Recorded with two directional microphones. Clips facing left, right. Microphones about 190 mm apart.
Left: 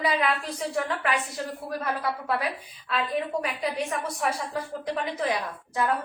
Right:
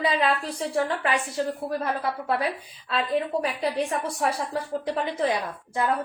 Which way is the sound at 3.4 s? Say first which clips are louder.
Right 3 dB; 35° right (ahead or behind).